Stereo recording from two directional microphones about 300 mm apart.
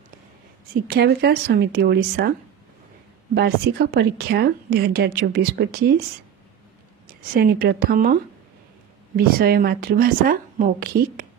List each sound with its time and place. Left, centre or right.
0.8 s a woman's voice: right
3.3 s a woman's voice: right
7.3 s speech: right